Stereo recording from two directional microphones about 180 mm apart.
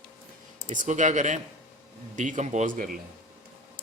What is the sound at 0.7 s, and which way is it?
A man's voice, 45° right (ahead or behind).